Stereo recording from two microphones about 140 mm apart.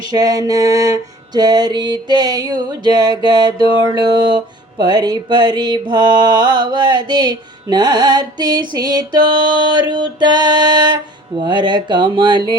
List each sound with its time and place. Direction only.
0.1 s mantra: 25° right (ahead or behind)